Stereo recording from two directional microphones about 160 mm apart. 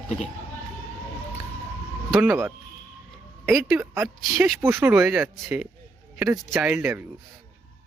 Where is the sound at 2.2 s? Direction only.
10° right (ahead or behind).